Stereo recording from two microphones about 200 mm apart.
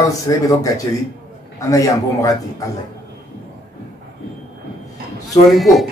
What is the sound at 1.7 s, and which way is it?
Speech, 15° left (ahead or behind).